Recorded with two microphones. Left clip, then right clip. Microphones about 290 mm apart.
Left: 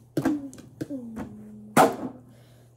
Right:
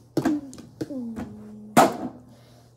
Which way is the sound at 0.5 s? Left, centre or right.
Centre.